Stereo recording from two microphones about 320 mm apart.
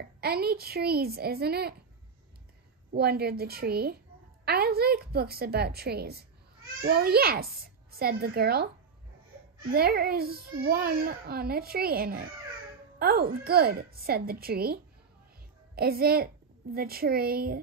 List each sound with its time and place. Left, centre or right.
0.2 s a child's voice: right
2.9 s a child's voice: right
9.7 s a child's voice: right